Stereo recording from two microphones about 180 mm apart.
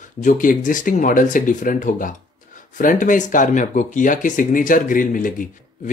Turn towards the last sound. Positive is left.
turn(degrees=50)  # may be behind; listen again after turning